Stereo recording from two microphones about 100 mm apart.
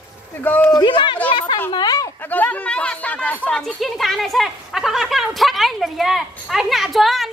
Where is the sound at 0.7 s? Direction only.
55° left (ahead or behind).